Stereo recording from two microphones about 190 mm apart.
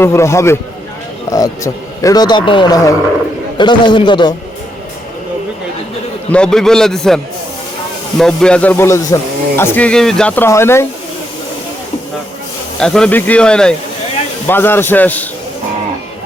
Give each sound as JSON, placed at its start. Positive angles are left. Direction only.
{"t": 0.0, "sound": "a man's voice", "side_deg": 15}
{"t": 6.3, "sound": "speech", "side_deg": 5}
{"t": 8.2, "sound": "speech", "side_deg": 5}
{"t": 12.8, "sound": "speech", "side_deg": 5}